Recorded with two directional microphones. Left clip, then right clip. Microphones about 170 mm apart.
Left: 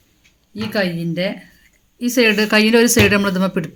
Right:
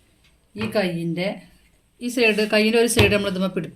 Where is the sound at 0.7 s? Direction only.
55° left (ahead or behind).